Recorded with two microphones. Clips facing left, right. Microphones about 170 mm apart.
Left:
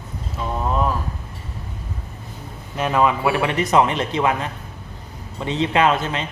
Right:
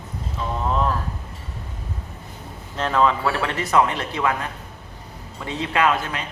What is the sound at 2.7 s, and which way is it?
A man's voice, 10° left (ahead or behind).